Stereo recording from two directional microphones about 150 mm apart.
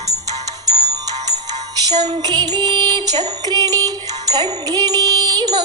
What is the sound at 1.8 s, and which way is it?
Jingle bell, 25° right (ahead or behind).